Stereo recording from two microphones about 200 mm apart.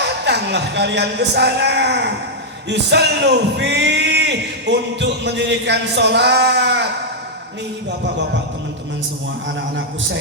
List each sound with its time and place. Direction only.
0.0 s speech: 60° right (ahead or behind)
2.6 s music: 60° right (ahead or behind)